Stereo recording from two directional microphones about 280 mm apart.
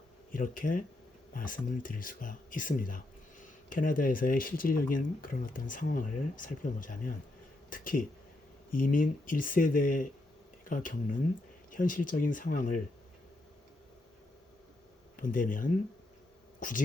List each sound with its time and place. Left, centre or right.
0.3 s speech: left
15.1 s speech: left